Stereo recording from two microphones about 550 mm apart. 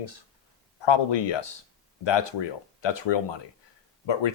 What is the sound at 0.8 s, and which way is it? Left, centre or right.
Speech, left.